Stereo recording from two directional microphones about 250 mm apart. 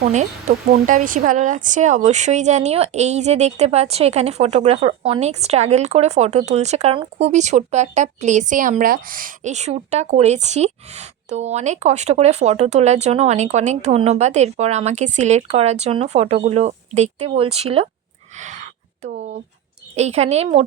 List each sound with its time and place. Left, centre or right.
0.0 s speech: right
18.3 s a sound: right
20.0 s speech: right